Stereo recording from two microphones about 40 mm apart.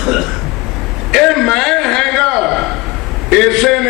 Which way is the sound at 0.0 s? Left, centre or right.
Centre.